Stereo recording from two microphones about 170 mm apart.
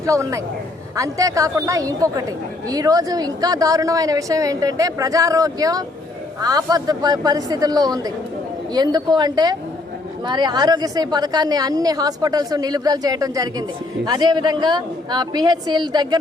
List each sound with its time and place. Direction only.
0.0 s a woman's voice: 20° right (ahead or behind)